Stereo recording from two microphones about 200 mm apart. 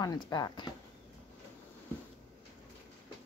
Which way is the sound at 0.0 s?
20° left (ahead or behind).